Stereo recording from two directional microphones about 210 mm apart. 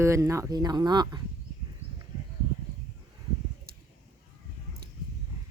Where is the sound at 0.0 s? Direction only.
15° right (ahead or behind).